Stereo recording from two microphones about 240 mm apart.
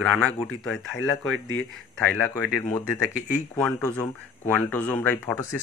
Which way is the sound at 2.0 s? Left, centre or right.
Centre.